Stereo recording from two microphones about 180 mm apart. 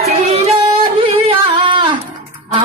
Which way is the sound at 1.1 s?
30° right (ahead or behind).